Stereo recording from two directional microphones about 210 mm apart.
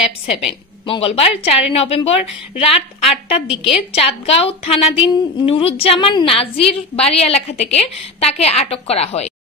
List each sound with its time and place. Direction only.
0.8 s a woman's voice: 25° left (ahead or behind)